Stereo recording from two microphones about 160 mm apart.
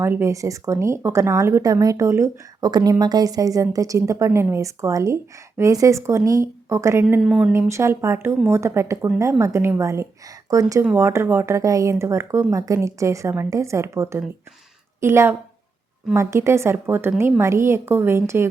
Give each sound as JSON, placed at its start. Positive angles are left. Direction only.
{"t": 0.0, "sound": "a woman's voice", "side_deg": -15}
{"t": 7.2, "sound": "speech", "side_deg": 0}
{"t": 7.7, "sound": "speech", "side_deg": -15}